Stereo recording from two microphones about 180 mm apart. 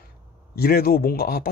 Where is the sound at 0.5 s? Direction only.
55° left (ahead or behind).